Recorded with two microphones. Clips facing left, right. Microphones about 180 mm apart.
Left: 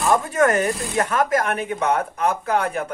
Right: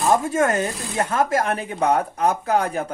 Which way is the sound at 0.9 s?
30° right (ahead or behind).